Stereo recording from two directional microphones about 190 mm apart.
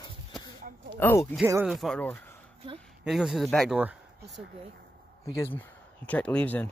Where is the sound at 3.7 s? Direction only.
10° right (ahead or behind).